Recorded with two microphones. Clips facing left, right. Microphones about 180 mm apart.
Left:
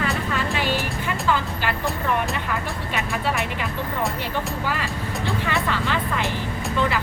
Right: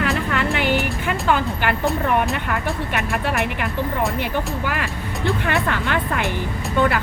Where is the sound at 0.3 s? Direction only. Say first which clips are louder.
Right 4 dB; 60° right (ahead or behind).